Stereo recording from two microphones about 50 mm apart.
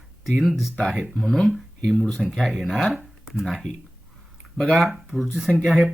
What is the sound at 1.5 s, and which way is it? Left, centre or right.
Speech, centre.